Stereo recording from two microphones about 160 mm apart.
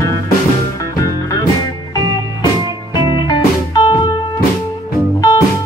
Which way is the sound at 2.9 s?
30° left (ahead or behind).